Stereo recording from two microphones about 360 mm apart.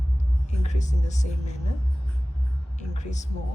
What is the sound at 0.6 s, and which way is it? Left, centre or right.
Speech, centre.